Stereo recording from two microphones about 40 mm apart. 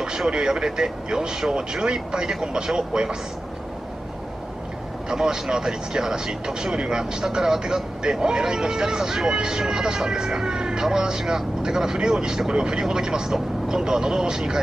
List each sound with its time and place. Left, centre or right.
0.3 s speech: centre
5.1 s speech: centre